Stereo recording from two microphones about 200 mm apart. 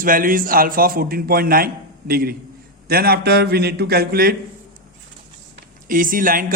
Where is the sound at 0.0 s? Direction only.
45° right (ahead or behind).